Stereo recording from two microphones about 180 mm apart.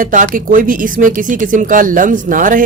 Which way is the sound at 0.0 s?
45° right (ahead or behind).